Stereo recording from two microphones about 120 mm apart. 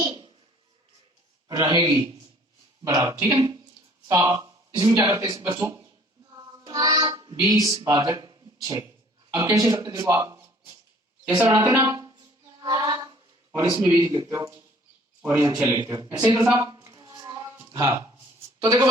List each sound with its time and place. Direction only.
0.0 s a sound: 45° right (ahead or behind)
1.5 s speech: 30° right (ahead or behind)
5.6 s a sound: 25° right (ahead or behind)
6.7 s child singing: 30° right (ahead or behind)
7.9 s speech: 30° right (ahead or behind)
11.4 s hands: 25° right (ahead or behind)
13.8 s speech: 20° right (ahead or behind)
15.6 s speech: 25° right (ahead or behind)
16.6 s music: 30° right (ahead or behind)
18.6 s speech: 25° right (ahead or behind)